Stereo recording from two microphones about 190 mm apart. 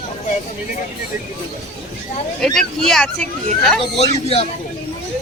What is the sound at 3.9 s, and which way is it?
Speech, 35° left (ahead or behind).